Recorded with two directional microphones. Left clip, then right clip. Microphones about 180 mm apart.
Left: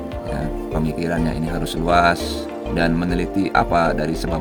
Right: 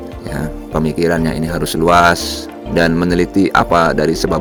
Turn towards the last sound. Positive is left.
turn(degrees=-35)  # may be behind; listen again after turning